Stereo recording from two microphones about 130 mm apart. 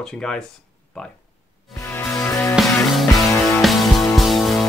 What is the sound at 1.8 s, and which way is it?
Music, 20° left (ahead or behind).